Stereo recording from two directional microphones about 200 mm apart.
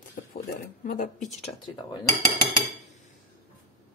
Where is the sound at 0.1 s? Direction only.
45° left (ahead or behind).